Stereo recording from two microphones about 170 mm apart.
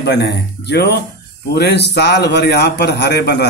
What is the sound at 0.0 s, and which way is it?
A man's voice, 85° left.